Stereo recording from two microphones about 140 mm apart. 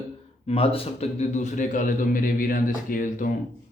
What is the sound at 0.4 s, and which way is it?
A man's voice, 45° left (ahead or behind).